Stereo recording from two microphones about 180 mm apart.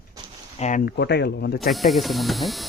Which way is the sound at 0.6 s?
45° left (ahead or behind).